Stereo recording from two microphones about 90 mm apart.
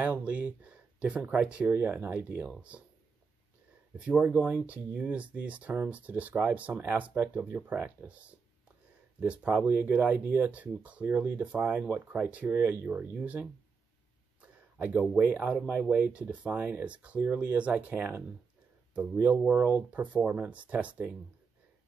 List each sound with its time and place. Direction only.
0.0 s speech: 15° right (ahead or behind)
4.0 s speech: 15° right (ahead or behind)